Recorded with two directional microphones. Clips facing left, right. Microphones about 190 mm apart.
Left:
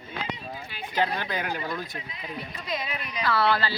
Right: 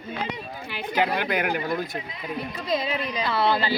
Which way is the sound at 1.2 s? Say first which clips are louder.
Right 5 dB; 15° right (ahead or behind).